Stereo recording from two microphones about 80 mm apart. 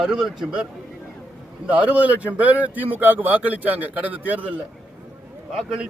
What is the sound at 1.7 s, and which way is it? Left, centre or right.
A man's voice, centre.